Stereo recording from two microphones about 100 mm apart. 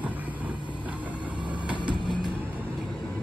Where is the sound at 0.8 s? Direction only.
15° right (ahead or behind).